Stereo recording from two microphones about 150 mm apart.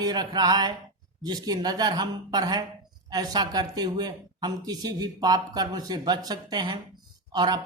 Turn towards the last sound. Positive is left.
turn(degrees=-25)  # may be behind; listen again after turning